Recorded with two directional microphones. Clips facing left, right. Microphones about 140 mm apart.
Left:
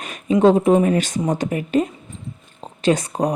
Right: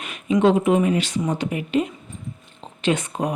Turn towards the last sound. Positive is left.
turn(degrees=40)  # may be behind; listen again after turning